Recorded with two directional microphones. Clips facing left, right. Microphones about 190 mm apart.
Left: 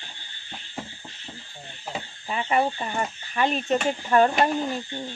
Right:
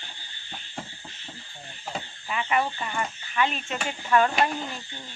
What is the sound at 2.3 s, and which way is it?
Speech, 35° left (ahead or behind).